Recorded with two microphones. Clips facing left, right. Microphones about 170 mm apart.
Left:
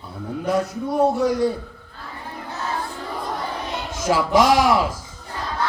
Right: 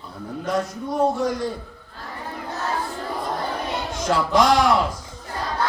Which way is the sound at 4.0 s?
5° left (ahead or behind).